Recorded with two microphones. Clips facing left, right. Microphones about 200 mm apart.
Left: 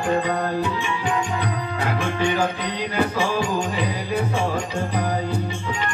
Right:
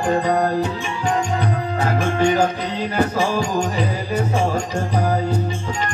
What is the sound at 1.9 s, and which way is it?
Music, 45° right (ahead or behind).